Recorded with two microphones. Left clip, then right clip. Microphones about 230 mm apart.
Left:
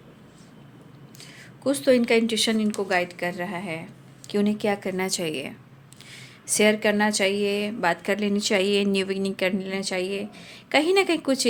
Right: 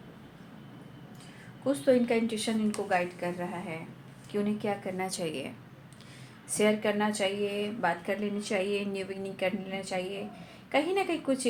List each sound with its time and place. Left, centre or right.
1.6 s a woman's voice: left
6.5 s a woman's voice: left